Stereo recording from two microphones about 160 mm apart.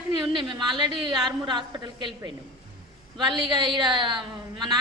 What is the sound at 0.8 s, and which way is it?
A woman's voice, 25° right (ahead or behind).